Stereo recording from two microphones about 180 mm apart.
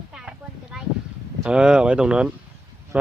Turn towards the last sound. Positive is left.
turn(degrees=-5)  # may be behind; listen again after turning